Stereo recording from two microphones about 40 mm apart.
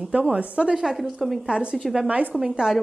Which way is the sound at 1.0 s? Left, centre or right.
Centre.